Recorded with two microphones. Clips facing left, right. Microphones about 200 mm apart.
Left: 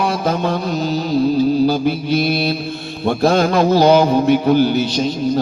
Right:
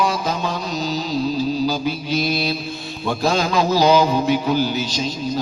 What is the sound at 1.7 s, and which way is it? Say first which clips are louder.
Speech: left 5 dB; 55° left (ahead or behind).